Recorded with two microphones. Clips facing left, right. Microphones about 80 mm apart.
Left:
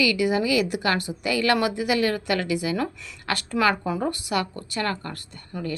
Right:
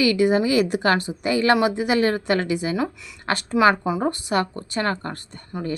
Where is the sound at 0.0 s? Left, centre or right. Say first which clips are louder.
Right 4 dB; right; by 4.0 s centre.